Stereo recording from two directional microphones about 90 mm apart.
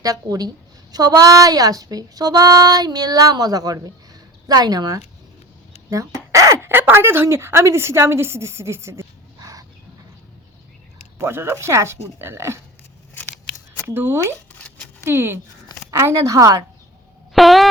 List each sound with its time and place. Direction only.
0.0 s speech: 45° right (ahead or behind)
6.7 s a woman's voice: 25° right (ahead or behind); by 9.6 s 40° right (ahead or behind)
11.2 s a woman's voice: 25° right (ahead or behind)
13.2 s scissors: 20° left (ahead or behind)
13.8 s a woman's voice: 25° right (ahead or behind)
17.3 s a sound: centre (ahead or behind)